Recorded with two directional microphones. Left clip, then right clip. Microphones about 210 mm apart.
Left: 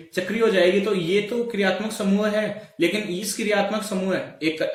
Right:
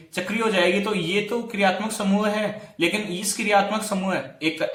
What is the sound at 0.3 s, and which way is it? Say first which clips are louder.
Speech: left 2 dB; 20° right (ahead or behind).